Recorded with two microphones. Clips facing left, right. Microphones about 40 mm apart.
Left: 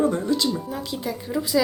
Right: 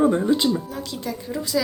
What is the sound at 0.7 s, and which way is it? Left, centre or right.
Speech, centre.